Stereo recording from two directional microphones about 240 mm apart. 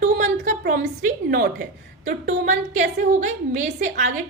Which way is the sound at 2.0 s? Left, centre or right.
Right.